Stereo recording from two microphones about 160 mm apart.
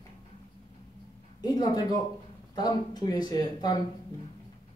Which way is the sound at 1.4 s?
25° left (ahead or behind).